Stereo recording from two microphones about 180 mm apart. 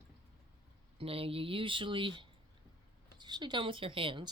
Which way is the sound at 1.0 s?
30° right (ahead or behind).